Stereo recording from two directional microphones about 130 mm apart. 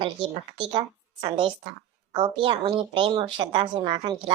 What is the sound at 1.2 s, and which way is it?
A woman's voice, 40° right (ahead or behind).